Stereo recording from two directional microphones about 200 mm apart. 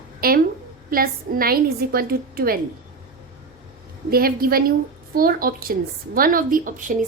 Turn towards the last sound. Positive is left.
turn(degrees=-40)  # may be behind; listen again after turning